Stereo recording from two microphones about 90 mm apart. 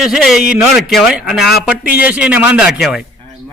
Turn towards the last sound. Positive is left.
turn(degrees=-10)  # may be behind; listen again after turning